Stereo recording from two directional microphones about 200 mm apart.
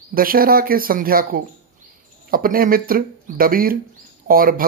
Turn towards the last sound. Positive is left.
turn(degrees=-45)  # may be behind; listen again after turning